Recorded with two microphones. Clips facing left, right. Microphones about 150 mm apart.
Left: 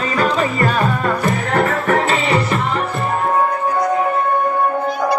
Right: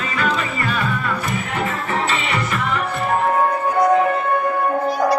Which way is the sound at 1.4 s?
60° left (ahead or behind).